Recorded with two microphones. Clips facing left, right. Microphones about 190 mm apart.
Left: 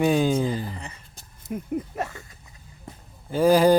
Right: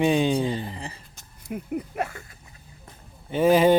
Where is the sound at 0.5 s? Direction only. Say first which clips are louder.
Even; 30° right (ahead or behind).